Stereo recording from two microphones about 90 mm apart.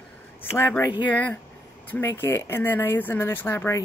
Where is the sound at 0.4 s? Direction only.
25° left (ahead or behind).